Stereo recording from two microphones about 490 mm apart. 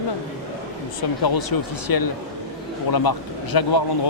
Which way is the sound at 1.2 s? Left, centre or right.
Left.